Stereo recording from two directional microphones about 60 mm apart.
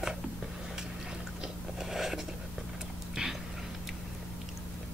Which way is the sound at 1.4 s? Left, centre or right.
Centre.